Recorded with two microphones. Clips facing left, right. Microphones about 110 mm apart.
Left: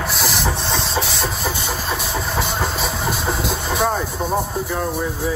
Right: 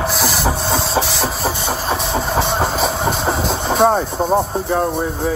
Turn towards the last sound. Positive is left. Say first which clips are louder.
# right 6 dB
turn(degrees=-35)  # may be behind; listen again after turning